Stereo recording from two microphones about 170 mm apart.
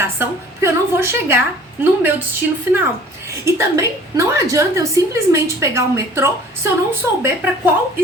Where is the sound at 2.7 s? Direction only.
10° right (ahead or behind).